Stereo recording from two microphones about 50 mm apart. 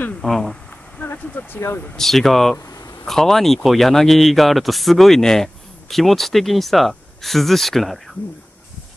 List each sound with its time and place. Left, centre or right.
0.2 s speech: centre
1.0 s speech: left
2.0 s a man's voice: centre